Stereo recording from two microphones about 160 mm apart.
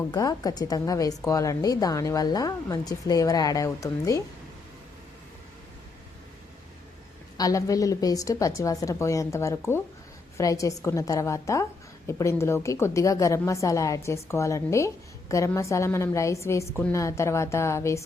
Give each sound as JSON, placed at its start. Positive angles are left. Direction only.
{"t": 0.1, "sound": "a woman's voice", "side_deg": 25}
{"t": 7.3, "sound": "a woman's voice", "side_deg": 20}